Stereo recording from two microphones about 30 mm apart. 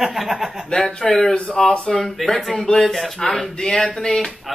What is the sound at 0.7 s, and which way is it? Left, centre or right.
Speech, left.